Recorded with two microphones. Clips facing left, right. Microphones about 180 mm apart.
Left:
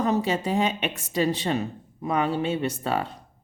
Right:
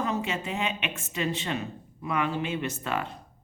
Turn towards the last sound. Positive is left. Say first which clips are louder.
# left 4 dB
turn(degrees=30)  # may be behind; listen again after turning